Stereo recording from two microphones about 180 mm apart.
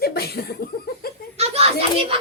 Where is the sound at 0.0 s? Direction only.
60° left (ahead or behind).